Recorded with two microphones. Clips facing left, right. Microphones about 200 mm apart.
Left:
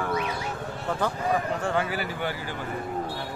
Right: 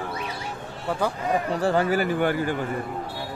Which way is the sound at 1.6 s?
40° right (ahead or behind).